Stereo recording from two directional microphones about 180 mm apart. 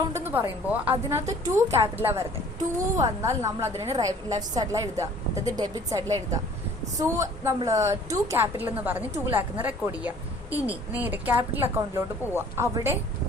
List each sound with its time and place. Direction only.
0.1 s a woman's voice: 10° right (ahead or behind)